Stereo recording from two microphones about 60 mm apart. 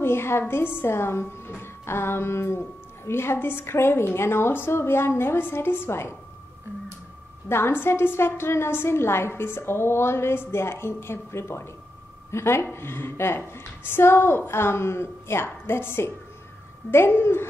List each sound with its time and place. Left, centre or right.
0.0 s a woman's voice: left
1.6 s music: left
3.1 s a woman's voice: left
7.4 s a woman's voice: left